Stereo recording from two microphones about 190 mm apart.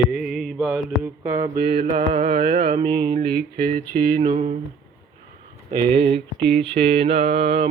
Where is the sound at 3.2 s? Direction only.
55° right (ahead or behind).